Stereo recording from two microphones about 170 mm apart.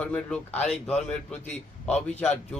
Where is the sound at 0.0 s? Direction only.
5° left (ahead or behind).